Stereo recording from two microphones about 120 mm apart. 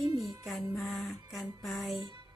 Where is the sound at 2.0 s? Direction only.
35° right (ahead or behind).